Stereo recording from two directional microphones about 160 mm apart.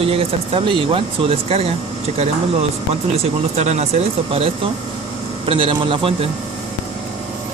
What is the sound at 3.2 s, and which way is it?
Speech, 45° right (ahead or behind).